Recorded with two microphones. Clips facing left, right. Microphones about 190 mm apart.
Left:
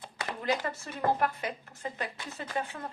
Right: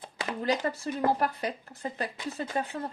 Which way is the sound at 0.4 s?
35° right (ahead or behind).